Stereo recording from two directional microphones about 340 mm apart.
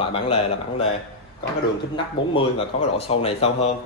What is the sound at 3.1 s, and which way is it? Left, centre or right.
Speech, centre.